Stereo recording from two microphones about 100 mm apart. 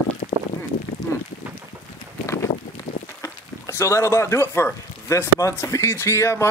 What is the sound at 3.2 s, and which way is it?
Speech, 30° left (ahead or behind).